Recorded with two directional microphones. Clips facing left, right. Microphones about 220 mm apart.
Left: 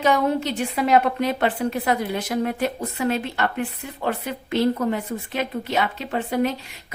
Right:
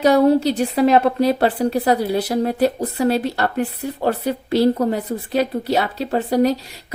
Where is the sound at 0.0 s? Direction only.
35° right (ahead or behind).